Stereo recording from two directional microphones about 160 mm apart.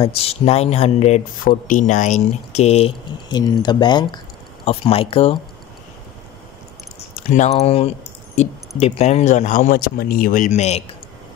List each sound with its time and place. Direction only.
0.0 s speech: 35° left (ahead or behind)
3.3 s speech: 25° left (ahead or behind)
7.2 s speech: 45° left (ahead or behind)